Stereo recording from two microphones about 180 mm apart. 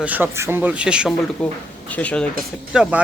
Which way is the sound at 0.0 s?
10° right (ahead or behind).